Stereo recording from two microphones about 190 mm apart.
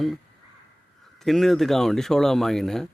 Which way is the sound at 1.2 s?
Centre (ahead or behind).